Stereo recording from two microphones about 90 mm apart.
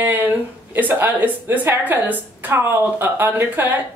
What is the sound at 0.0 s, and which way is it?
A woman's voice, 20° right (ahead or behind).